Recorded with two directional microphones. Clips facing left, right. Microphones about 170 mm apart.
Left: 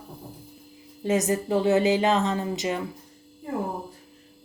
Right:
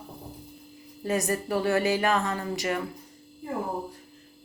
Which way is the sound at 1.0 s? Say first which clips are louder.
Left 4 dB; 20° left (ahead or behind).